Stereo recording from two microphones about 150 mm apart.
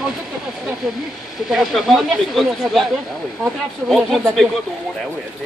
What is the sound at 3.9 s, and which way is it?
Speech, centre (ahead or behind).